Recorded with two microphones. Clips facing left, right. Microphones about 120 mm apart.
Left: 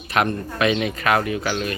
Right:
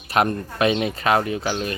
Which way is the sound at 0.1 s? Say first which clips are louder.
Right 1 dB; 35° right (ahead or behind).